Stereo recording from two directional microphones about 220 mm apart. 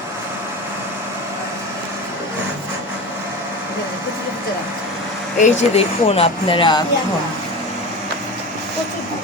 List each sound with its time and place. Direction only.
5.4 s speech: 25° left (ahead or behind)